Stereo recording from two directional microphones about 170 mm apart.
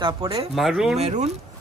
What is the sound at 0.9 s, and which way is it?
Speech, 40° right (ahead or behind).